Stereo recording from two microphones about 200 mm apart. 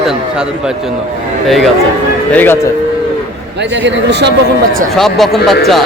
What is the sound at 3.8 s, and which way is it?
Speech, 60° right (ahead or behind).